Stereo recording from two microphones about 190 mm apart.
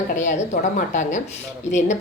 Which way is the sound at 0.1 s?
40° left (ahead or behind).